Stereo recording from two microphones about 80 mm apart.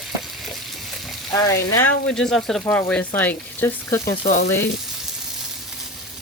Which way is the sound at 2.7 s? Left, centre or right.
Left.